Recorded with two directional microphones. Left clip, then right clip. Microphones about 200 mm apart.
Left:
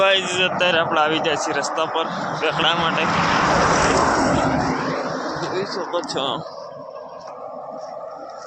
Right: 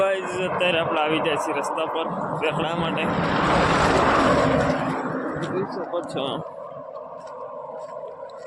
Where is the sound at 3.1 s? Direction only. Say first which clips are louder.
Left 2 dB; 40° left (ahead or behind).